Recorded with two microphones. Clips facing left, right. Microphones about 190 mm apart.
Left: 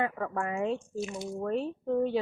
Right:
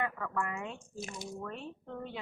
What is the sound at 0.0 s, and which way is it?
A woman's voice, 30° left (ahead or behind).